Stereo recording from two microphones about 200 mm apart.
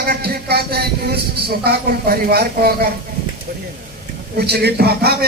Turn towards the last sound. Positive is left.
turn(degrees=-50)  # may be behind; listen again after turning